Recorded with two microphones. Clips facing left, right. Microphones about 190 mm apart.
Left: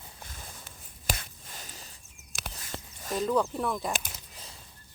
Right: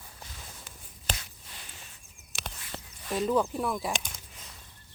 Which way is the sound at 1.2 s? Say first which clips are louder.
Left 3 dB; 45° left (ahead or behind).